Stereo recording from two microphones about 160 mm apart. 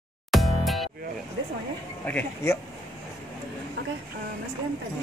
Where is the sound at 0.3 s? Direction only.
Centre (ahead or behind).